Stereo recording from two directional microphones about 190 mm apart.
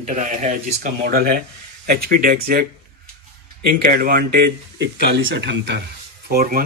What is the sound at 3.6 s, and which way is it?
Speech, 50° right (ahead or behind).